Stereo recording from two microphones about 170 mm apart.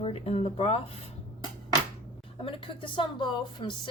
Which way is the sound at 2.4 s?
30° left (ahead or behind).